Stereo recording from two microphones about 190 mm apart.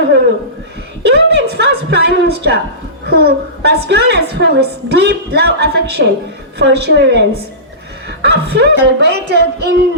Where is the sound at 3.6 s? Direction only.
60° right (ahead or behind).